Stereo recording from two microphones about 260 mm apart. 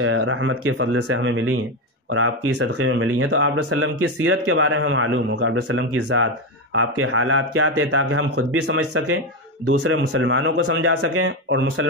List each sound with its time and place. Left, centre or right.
0.0 s a man's voice: right